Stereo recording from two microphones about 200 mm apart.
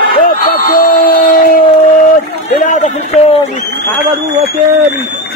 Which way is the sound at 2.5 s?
35° left (ahead or behind).